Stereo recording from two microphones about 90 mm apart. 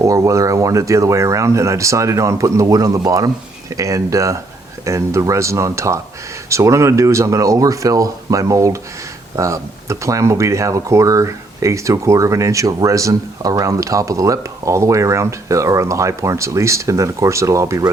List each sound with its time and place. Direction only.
0.0 s speech: 35° right (ahead or behind)